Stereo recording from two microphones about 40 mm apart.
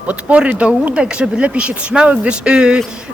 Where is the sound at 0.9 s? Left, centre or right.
Right.